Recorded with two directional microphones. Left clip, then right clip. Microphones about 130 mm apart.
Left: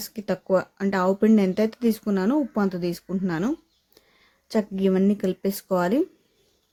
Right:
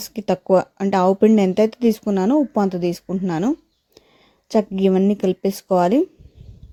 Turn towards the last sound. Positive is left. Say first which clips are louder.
# right 6 dB
turn(degrees=-40)  # may be behind; listen again after turning